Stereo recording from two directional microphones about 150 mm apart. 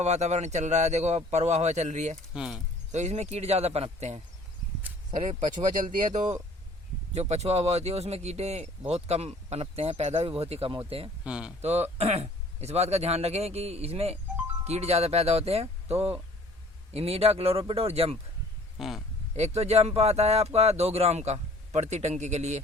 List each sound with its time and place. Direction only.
0.0 s speech: 45° right (ahead or behind)
2.3 s speech: 5° right (ahead or behind)
2.9 s speech: 50° right (ahead or behind)
5.1 s a man's voice: 35° right (ahead or behind)
7.1 s a man's voice: 45° right (ahead or behind)
11.2 s speech: 5° right (ahead or behind)
11.6 s a man's voice: 45° right (ahead or behind)
18.8 s speech: centre (ahead or behind)
19.4 s speech: 45° right (ahead or behind)